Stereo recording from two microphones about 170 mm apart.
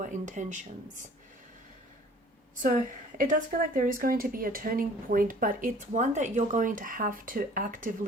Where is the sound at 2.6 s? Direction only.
50° right (ahead or behind).